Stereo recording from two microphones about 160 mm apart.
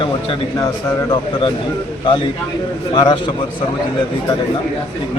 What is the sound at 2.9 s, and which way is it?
Speech, 30° left (ahead or behind).